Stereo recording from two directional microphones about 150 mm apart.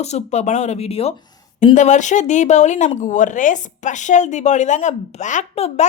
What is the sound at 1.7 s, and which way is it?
Speech, 55° left (ahead or behind).